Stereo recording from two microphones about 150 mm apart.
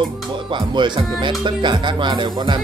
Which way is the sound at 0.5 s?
30° right (ahead or behind).